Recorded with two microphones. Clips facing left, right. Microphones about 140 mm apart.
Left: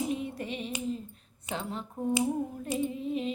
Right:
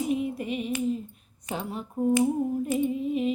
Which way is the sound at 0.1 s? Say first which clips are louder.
Right 6 dB; 5° right (ahead or behind).